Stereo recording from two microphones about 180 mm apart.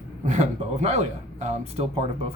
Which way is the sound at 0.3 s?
40° right (ahead or behind).